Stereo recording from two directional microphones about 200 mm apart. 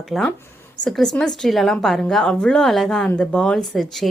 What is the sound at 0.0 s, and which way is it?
A woman's voice, centre (ahead or behind).